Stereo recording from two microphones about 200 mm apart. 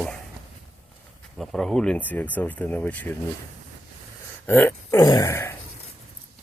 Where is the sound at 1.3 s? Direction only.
Centre (ahead or behind).